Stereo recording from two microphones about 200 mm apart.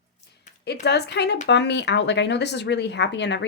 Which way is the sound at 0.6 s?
55° left (ahead or behind).